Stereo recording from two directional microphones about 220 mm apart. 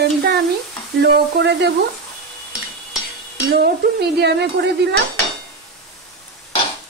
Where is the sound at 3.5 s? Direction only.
45° right (ahead or behind).